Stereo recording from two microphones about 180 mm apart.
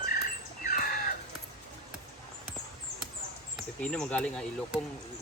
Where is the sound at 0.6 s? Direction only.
50° left (ahead or behind).